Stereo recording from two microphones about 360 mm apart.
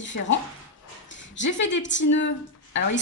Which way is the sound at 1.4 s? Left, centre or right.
Left.